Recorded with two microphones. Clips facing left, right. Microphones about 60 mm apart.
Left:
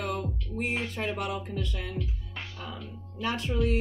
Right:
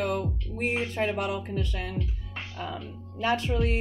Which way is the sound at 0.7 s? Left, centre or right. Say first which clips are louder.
Right 5 dB; right.